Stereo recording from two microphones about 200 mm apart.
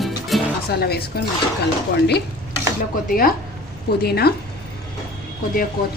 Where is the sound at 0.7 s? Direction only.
55° left (ahead or behind).